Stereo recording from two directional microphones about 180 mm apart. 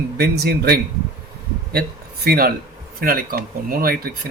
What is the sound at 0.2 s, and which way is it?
Speech, 60° right (ahead or behind).